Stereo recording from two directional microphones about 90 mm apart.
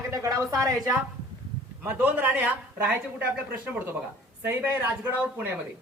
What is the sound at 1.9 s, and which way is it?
A woman's voice, 20° right (ahead or behind).